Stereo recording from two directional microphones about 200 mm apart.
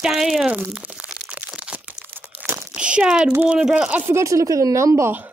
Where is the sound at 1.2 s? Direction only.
5° right (ahead or behind).